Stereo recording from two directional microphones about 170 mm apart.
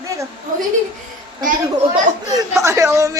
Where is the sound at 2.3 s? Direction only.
20° right (ahead or behind).